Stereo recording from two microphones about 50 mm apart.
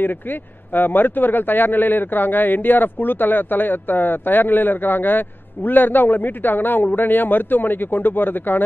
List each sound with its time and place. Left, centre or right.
0.0 s a man's voice: left